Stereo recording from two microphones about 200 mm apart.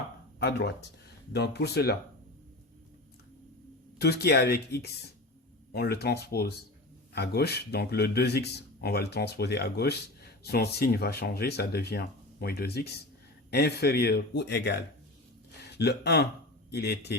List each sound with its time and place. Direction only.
0.3 s speech: 55° left (ahead or behind)
3.9 s speech: 55° left (ahead or behind)